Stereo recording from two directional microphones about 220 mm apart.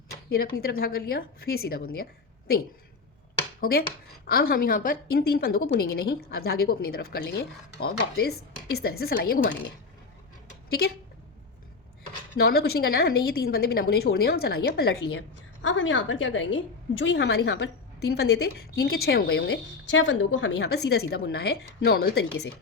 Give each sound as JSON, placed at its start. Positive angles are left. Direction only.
{"t": 0.3, "sound": "a woman's voice", "side_deg": 45}
{"t": 3.6, "sound": "a woman's voice", "side_deg": 45}
{"t": 12.4, "sound": "a woman's voice", "side_deg": 45}
{"t": 15.6, "sound": "a woman's voice", "side_deg": 60}